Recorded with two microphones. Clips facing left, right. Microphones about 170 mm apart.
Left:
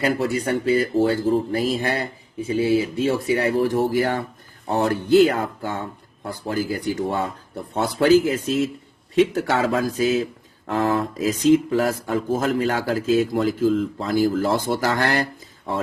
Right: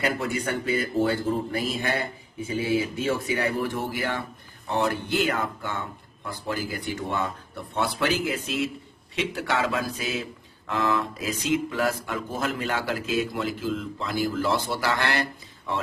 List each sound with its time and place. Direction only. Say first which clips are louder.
0.0 s speech: left 5 dB; 30° left (ahead or behind)
2.4 s speech: left 6 dB; 30° left (ahead or behind)